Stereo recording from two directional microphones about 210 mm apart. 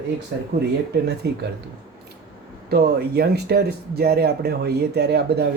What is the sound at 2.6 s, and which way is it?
Speech, 50° right (ahead or behind).